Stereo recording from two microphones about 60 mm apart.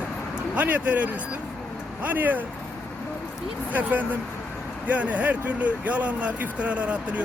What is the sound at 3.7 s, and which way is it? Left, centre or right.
Speech, right.